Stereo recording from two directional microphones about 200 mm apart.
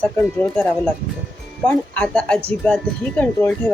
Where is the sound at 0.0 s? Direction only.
5° left (ahead or behind).